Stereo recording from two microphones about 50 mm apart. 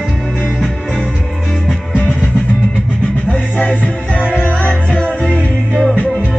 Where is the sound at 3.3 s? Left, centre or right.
Left.